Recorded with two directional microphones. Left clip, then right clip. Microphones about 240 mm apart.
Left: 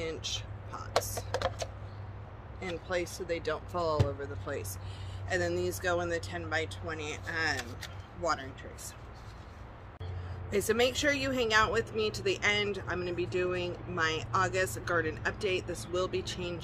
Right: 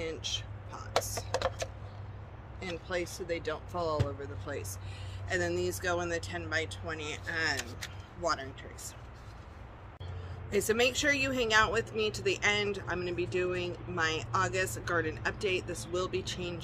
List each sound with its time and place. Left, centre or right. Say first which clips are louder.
0.0 s a sound: even; centre
2.6 s speech: left 1 dB; centre
5.3 s speech: even; centre
10.5 s speech: even; centre